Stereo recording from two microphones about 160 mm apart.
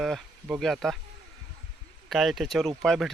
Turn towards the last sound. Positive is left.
turn(degrees=0)  # may be behind; listen again after turning